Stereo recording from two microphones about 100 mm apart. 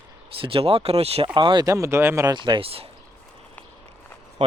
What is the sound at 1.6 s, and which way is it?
Speech, 30° right (ahead or behind).